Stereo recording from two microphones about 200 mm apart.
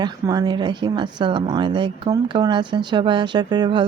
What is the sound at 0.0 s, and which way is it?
Speech, 20° right (ahead or behind).